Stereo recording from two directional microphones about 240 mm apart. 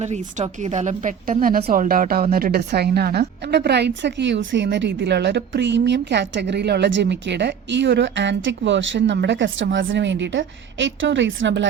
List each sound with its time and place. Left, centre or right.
0.0 s a woman's voice: right